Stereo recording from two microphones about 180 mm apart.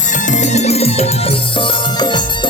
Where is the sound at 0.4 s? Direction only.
40° left (ahead or behind).